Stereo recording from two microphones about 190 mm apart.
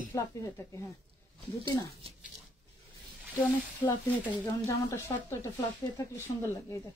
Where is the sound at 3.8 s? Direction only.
15° left (ahead or behind).